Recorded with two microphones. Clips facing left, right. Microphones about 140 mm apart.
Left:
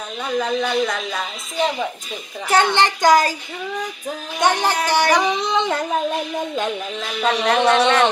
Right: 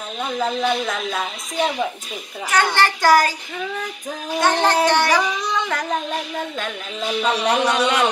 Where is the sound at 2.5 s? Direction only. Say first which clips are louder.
Left 2 dB; 20° left (ahead or behind).